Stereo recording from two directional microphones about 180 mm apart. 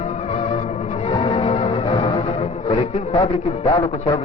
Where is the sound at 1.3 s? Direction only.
35° left (ahead or behind).